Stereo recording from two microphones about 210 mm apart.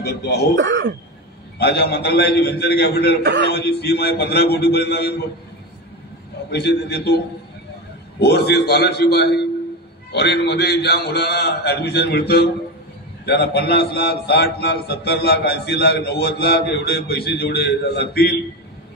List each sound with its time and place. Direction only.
0.0 s a man's voice: 50° left (ahead or behind)
0.6 s speech: 60° right (ahead or behind)
1.6 s a man's voice: 50° left (ahead or behind)
6.5 s a man's voice: 50° left (ahead or behind)
8.2 s a man's voice: 50° left (ahead or behind)